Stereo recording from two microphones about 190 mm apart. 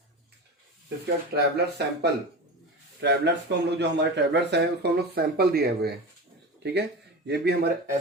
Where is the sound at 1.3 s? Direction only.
60° right (ahead or behind).